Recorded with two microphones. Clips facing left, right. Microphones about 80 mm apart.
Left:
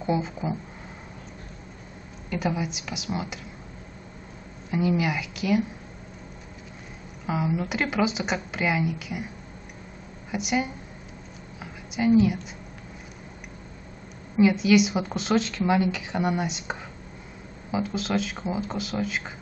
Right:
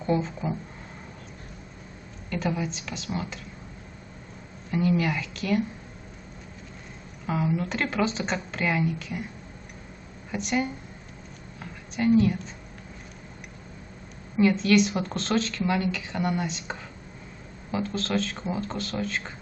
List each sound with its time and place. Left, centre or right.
0.0 s a woman's voice: centre
2.2 s a woman's voice: centre
4.6 s a woman's voice: centre
7.2 s a woman's voice: centre
10.3 s a woman's voice: centre
11.6 s a sound: centre
14.3 s a woman's voice: centre